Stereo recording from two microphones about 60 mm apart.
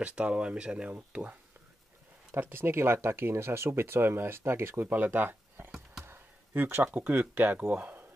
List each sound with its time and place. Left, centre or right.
0.0 s speech: centre
2.3 s speech: right
4.8 s speech: right